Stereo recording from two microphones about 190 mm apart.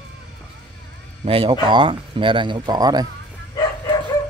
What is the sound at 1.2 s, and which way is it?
Speech, 30° right (ahead or behind).